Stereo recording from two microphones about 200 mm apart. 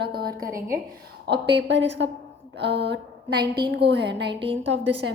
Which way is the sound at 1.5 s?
65° right (ahead or behind).